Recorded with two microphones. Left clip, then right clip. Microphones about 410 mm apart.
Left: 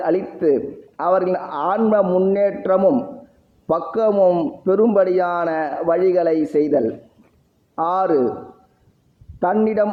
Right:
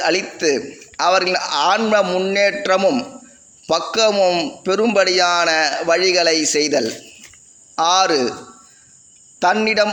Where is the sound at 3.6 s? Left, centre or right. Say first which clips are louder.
Right 2 dB; left.